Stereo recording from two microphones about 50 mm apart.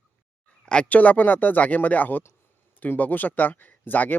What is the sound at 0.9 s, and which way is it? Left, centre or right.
Speech, left.